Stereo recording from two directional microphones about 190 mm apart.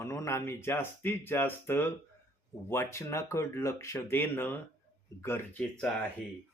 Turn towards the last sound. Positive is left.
turn(degrees=10)  # may be behind; listen again after turning